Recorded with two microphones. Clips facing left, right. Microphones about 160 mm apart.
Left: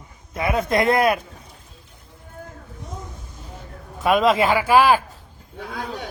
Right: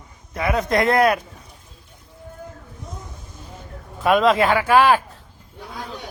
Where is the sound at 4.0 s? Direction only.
Centre (ahead or behind).